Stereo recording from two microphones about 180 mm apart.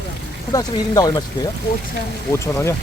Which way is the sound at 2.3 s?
15° left (ahead or behind).